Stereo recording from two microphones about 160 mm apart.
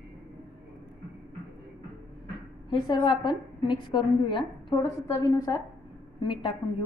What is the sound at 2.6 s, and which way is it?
A woman's voice, 30° left (ahead or behind).